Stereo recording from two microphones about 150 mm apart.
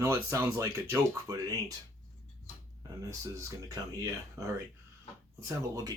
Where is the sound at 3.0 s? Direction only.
20° right (ahead or behind).